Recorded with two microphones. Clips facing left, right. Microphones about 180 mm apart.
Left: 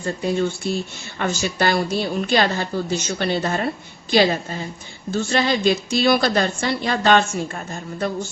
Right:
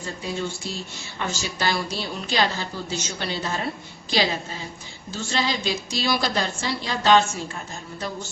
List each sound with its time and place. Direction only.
0.0 s a woman's voice: 60° left (ahead or behind)